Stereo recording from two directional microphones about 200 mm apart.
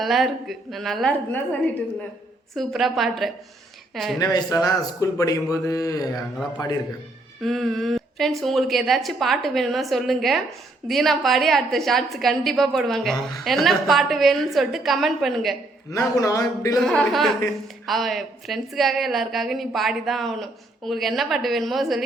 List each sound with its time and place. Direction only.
0.0 s a woman's voice: centre (ahead or behind)
2.6 s a woman's voice: centre (ahead or behind)
4.2 s a man's voice: 20° left (ahead or behind)
7.4 s a sound: centre (ahead or behind)
8.4 s a woman's voice: centre (ahead or behind)
15.9 s a man's voice: 15° left (ahead or behind)
16.8 s a woman's voice: centre (ahead or behind)